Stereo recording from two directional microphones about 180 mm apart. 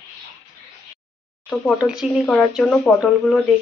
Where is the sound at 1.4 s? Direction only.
5° right (ahead or behind).